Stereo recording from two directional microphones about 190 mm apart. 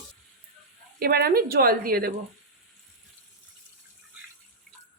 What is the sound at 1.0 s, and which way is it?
Speech, 55° right (ahead or behind).